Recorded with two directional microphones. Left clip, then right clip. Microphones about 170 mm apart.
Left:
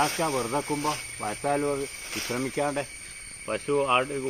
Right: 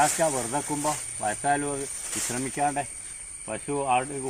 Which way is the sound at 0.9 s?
5° right (ahead or behind).